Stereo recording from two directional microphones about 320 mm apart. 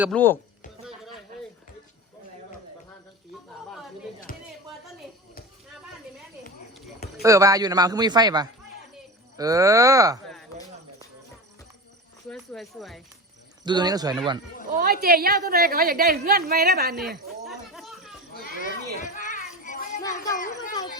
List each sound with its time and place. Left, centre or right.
0.0 s speech: centre
4.3 s a sound: left
7.2 s speech: centre
12.3 s speech: centre
13.7 s speech: centre
14.7 s a woman's voice: right
17.4 s a sound: centre
18.3 s children playing: left
20.3 s speech: left